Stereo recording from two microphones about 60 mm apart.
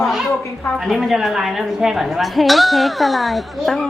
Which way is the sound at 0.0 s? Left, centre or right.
Centre.